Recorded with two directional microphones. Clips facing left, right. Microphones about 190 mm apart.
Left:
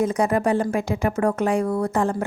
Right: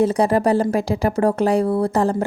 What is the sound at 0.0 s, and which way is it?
Speech, 35° right (ahead or behind).